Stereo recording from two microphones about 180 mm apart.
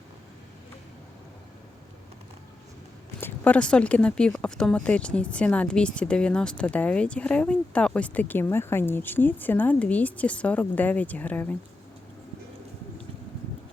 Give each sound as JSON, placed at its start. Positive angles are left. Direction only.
{"t": 3.2, "sound": "speech", "side_deg": 10}